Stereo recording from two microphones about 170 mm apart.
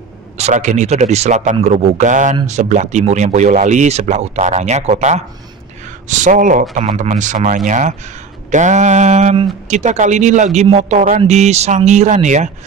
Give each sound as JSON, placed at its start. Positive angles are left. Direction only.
{"t": 0.4, "sound": "speech", "side_deg": -45}